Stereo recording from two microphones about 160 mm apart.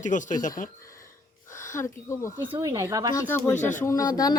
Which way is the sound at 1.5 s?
15° left (ahead or behind).